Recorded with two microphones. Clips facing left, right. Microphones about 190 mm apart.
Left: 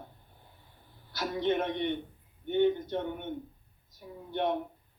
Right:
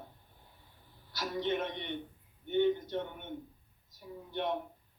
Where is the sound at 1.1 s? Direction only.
55° left (ahead or behind).